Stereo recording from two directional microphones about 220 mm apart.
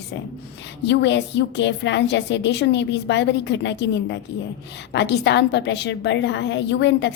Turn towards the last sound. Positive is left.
turn(degrees=50)  # may be behind; listen again after turning